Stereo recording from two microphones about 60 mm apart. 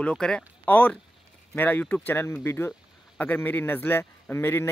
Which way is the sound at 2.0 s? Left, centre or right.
Left.